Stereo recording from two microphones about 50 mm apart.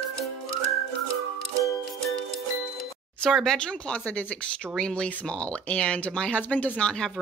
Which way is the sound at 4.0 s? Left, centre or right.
Left.